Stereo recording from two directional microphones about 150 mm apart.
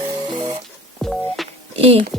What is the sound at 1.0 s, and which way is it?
Music, centre (ahead or behind).